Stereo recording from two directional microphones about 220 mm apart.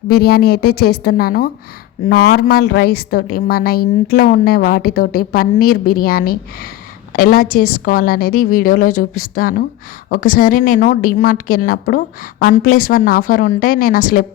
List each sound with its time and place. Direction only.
0.1 s a woman's voice: 45° left (ahead or behind)